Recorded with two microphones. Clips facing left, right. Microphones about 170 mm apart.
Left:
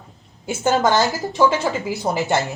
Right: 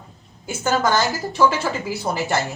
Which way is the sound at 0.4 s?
20° left (ahead or behind).